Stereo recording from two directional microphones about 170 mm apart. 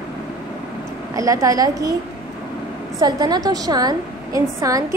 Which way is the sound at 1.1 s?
20° right (ahead or behind).